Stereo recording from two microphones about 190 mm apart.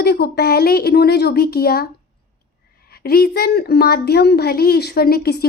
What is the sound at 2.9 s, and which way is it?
Speech, 55° left (ahead or behind).